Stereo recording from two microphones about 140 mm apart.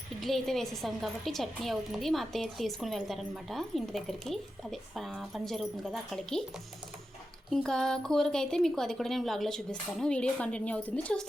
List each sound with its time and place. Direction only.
0.2 s a woman's voice: centre (ahead or behind)
7.5 s a woman's voice: 5° left (ahead or behind)